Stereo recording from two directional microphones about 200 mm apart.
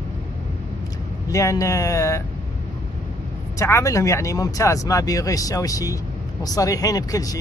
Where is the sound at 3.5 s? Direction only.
15° left (ahead or behind).